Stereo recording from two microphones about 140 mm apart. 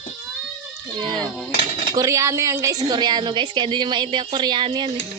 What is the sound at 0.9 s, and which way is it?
A woman's voice, 35° right (ahead or behind).